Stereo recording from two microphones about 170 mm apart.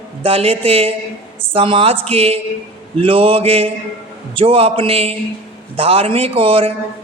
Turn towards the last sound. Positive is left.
turn(degrees=-35)  # may be behind; listen again after turning